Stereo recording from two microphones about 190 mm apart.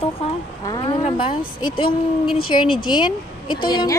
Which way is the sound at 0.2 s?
30° left (ahead or behind).